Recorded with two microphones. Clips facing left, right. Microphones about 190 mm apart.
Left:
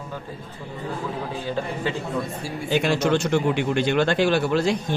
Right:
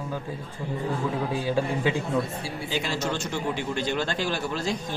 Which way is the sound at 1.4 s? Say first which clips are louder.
Right 1 dB; 10° right (ahead or behind).